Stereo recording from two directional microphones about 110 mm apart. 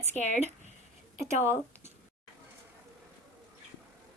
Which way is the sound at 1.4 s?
20° right (ahead or behind).